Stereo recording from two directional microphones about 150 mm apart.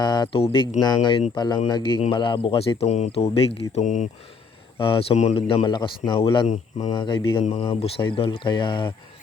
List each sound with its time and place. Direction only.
0.0 s speech: 30° left (ahead or behind); by 4.1 s 55° left (ahead or behind)
4.8 s speech: 40° left (ahead or behind)
5.5 s speech: 35° left (ahead or behind)
6.5 s speech: 50° left (ahead or behind)
6.9 s speech: 35° left (ahead or behind)